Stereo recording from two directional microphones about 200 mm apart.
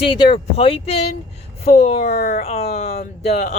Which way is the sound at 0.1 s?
25° left (ahead or behind).